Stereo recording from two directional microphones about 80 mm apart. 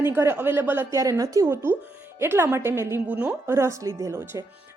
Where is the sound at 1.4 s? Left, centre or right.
Right.